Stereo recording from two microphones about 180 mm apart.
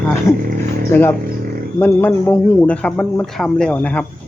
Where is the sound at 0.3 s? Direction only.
15° left (ahead or behind).